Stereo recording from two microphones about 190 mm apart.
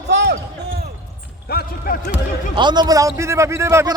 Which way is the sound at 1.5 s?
55° left (ahead or behind).